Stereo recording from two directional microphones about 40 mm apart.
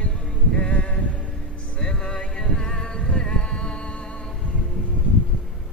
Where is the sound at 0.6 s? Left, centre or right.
Left.